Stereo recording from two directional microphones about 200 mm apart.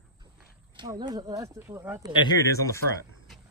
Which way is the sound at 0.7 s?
20° right (ahead or behind).